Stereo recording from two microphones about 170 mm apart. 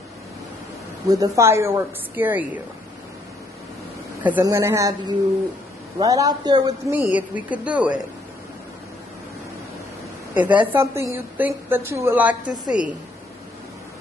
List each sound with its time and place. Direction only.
1.0 s a woman's voice: 20° right (ahead or behind)
4.2 s a woman's voice: 10° right (ahead or behind)
6.9 s a woman's voice: 10° right (ahead or behind)
10.3 s a woman's voice: 10° right (ahead or behind)